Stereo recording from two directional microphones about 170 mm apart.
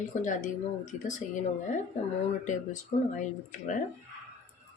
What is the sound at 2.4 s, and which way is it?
Speech, 45° left (ahead or behind).